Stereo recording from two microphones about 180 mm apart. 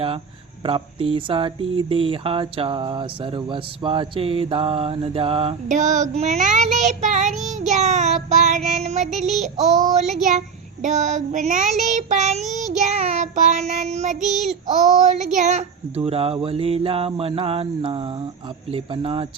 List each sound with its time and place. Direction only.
0.6 s speech: 30° right (ahead or behind)
5.6 s child singing: 40° right (ahead or behind)
18.7 s speech: 30° right (ahead or behind)